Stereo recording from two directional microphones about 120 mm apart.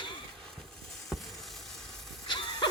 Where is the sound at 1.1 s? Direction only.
Centre (ahead or behind).